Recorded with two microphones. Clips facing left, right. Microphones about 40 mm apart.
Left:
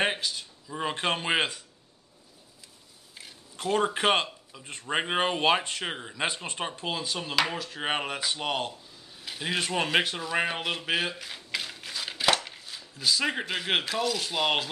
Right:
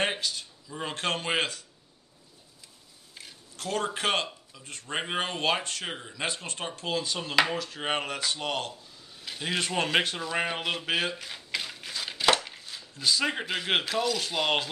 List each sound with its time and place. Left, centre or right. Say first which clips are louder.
0.0 s speech: left 1 dB; centre
3.5 s speech: left 4 dB; centre